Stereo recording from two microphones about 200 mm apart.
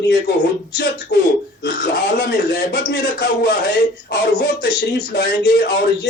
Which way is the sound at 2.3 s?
55° left (ahead or behind).